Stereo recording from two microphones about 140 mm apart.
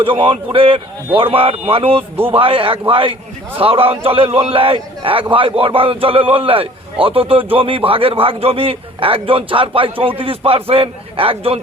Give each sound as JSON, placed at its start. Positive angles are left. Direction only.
{"t": 0.0, "sound": "a man's voice", "side_deg": -40}